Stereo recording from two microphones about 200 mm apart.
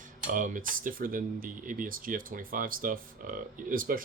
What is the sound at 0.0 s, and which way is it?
Speech, 40° right (ahead or behind).